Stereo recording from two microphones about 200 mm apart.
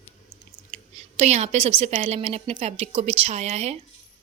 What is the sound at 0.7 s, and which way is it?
A woman's voice, 35° right (ahead or behind).